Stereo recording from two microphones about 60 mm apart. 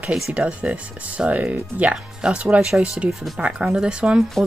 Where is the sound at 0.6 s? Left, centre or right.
Right.